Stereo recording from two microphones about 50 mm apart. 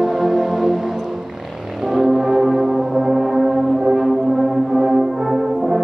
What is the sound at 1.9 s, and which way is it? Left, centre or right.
Music, centre.